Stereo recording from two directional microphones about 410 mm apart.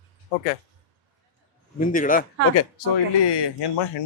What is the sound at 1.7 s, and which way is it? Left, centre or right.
Speech, centre.